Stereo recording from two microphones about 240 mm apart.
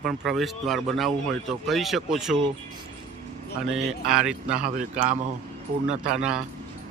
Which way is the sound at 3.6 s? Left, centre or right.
Centre.